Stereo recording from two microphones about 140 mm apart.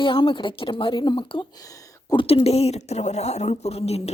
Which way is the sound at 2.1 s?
45° left (ahead or behind).